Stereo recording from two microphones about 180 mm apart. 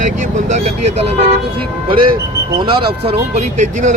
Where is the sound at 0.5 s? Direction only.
40° right (ahead or behind).